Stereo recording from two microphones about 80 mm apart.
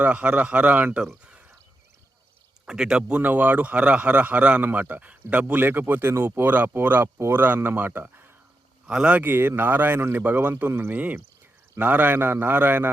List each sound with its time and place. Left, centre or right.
0.0 s a man's voice: centre
1.2 s a sound: centre
2.6 s a man's voice: centre
3.2 s a man's voice: centre
8.9 s a man's voice: centre